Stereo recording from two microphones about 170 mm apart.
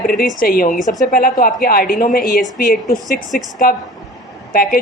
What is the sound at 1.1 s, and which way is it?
A woman's voice, 55° left (ahead or behind).